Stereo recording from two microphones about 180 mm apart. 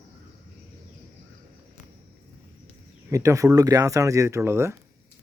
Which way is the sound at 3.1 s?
15° right (ahead or behind).